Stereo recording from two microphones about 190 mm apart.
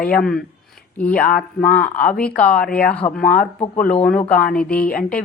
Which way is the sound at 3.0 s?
35° left (ahead or behind).